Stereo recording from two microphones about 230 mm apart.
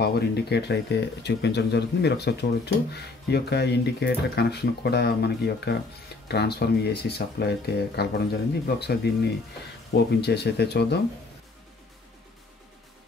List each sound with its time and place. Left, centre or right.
0.0 s speech: left
10.2 s speech: left